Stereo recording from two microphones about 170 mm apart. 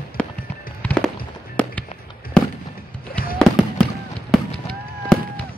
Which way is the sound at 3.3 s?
Centre (ahead or behind).